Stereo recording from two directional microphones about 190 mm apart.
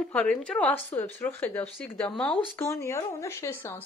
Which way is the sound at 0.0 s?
5° left (ahead or behind).